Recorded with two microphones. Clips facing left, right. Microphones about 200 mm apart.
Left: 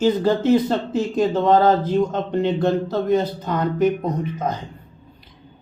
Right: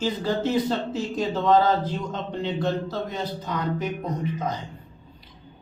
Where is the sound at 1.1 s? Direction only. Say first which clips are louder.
Left 4 dB; 55° left (ahead or behind).